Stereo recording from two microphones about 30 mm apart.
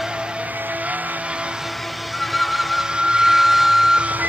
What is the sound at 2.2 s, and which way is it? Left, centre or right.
Music, centre.